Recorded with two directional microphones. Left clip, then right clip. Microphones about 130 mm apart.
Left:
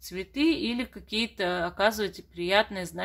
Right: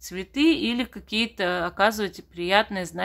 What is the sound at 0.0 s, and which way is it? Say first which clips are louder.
Speech: right 4 dB; 20° right (ahead or behind).